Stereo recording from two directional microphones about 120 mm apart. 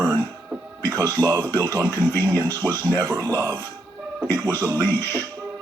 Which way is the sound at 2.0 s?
20° left (ahead or behind).